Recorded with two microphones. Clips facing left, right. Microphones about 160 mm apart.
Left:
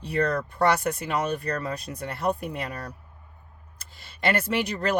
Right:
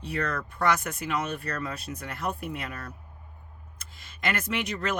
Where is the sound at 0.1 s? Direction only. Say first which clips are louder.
Left 6 dB; 35° left (ahead or behind).